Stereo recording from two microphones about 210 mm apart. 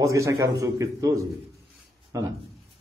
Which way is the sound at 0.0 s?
15° right (ahead or behind).